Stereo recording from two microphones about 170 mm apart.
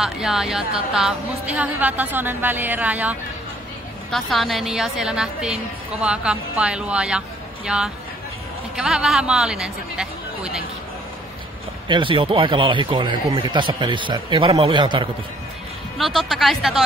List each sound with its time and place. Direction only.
0.0 s a woman's voice: 5° right (ahead or behind)
11.9 s speech: 30° right (ahead or behind)
16.0 s a woman's voice: centre (ahead or behind)